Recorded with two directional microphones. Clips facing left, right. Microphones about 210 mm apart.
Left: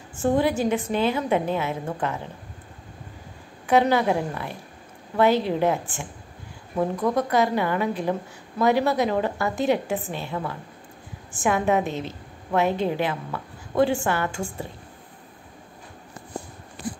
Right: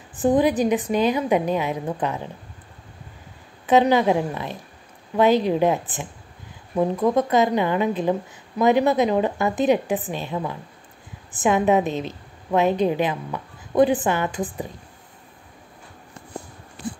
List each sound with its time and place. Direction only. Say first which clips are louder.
0.1 s a woman's voice: right 3 dB; 15° right (ahead or behind)
3.6 s a woman's voice: right 3 dB; 20° right (ahead or behind)